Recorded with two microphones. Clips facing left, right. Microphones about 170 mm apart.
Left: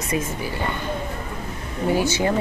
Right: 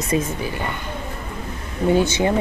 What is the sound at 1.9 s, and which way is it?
Speech, 20° right (ahead or behind).